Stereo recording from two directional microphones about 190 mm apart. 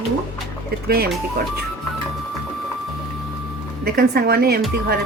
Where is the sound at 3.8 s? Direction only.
55° right (ahead or behind).